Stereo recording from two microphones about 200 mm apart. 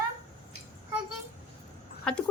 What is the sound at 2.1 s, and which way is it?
Speech, 5° left (ahead or behind).